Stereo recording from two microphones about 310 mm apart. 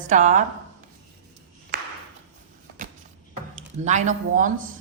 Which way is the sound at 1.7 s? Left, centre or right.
Right.